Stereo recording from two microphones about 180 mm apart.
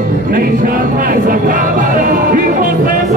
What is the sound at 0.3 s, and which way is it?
Music, 50° right (ahead or behind).